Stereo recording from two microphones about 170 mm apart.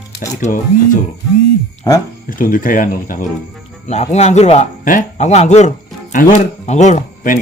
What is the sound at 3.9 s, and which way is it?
A man's voice, 40° left (ahead or behind).